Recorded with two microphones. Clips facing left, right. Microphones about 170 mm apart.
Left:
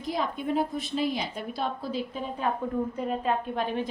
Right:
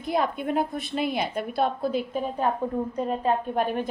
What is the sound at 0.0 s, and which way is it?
A woman's voice, 60° right (ahead or behind).